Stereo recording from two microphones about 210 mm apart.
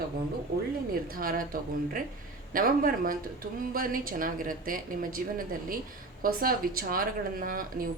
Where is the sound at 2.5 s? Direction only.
40° right (ahead or behind).